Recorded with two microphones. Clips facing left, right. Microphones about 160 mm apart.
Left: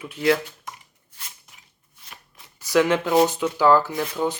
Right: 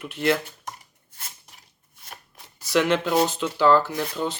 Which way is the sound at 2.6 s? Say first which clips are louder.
Left 2 dB; 10° left (ahead or behind).